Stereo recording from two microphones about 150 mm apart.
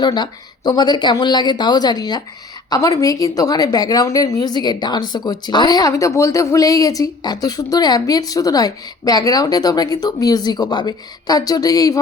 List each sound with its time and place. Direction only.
0.0 s a woman's voice: 30° left (ahead or behind)